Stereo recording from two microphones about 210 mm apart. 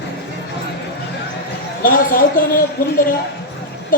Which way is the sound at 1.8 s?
40° left (ahead or behind).